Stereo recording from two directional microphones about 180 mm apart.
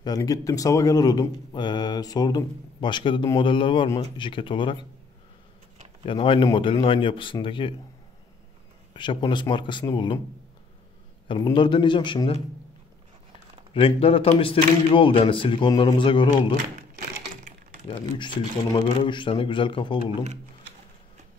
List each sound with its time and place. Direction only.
0.0 s speech: 20° left (ahead or behind)
6.0 s speech: 30° left (ahead or behind)
8.9 s speech: 25° left (ahead or behind)
11.2 s speech: 25° left (ahead or behind)
13.7 s speech: 30° left (ahead or behind)
18.1 s speech: 25° left (ahead or behind)